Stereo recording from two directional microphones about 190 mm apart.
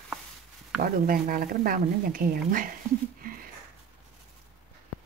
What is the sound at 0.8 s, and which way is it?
A woman's voice, 50° right (ahead or behind).